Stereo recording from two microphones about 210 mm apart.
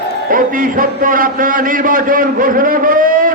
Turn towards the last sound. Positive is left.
turn(degrees=-40)  # may be behind; listen again after turning